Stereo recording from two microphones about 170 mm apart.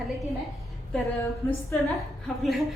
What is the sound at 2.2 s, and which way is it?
Speech, centre (ahead or behind).